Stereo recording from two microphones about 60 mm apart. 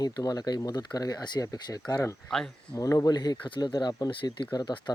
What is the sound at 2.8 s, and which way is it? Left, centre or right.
Speech, left.